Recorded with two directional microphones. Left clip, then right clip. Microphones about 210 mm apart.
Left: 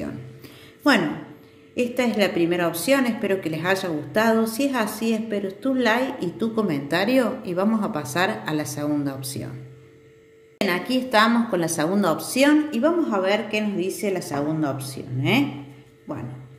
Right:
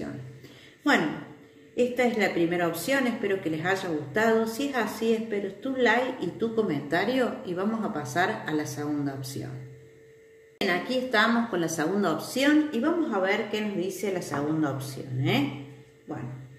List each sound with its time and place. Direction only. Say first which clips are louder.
1.8 s a woman's voice: left 2 dB; 50° left (ahead or behind)
10.6 s a woman's voice: left 3 dB; 50° left (ahead or behind)